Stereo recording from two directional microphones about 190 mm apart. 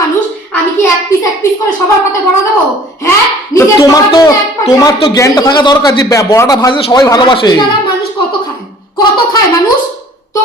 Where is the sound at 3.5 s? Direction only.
20° left (ahead or behind).